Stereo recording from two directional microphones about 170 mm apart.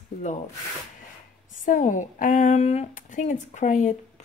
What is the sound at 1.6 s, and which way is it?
Speech, 50° left (ahead or behind).